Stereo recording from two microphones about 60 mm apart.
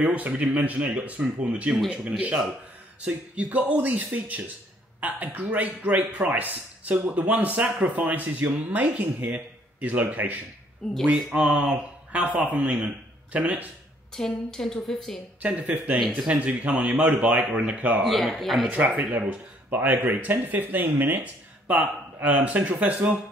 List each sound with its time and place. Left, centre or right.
0.0 s speech: right
10.8 s a woman's voice: centre
11.3 s speech: right
14.1 s a woman's voice: centre
15.4 s speech: right
18.0 s a man's voice: centre
19.2 s speech: right